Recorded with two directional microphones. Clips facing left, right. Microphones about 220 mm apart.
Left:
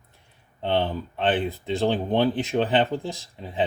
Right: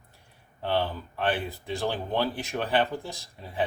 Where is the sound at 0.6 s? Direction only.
20° left (ahead or behind).